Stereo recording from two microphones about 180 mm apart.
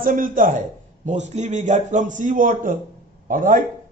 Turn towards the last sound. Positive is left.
turn(degrees=-45)  # may be behind; listen again after turning